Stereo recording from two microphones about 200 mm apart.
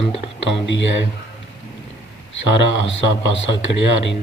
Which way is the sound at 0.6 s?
65° left (ahead or behind).